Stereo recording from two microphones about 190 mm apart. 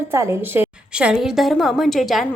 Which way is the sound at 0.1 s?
15° right (ahead or behind).